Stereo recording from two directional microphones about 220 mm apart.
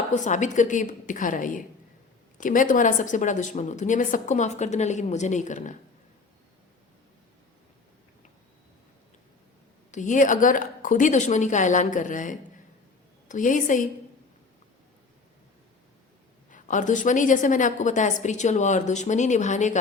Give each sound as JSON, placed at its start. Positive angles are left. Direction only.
{"t": 0.1, "sound": "a woman's voice", "side_deg": 35}
{"t": 9.9, "sound": "a woman's voice", "side_deg": 35}
{"t": 16.5, "sound": "a woman's voice", "side_deg": 35}